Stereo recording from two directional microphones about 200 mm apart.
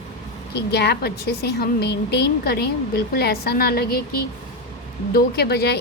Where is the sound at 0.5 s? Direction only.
55° left (ahead or behind).